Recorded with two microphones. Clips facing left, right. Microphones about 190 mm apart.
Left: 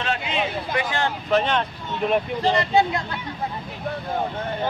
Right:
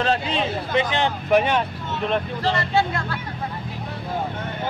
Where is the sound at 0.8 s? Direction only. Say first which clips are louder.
Right 2 dB; 20° right (ahead or behind).